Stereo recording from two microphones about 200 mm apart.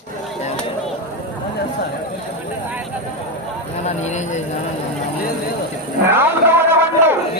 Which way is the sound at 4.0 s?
35° left (ahead or behind).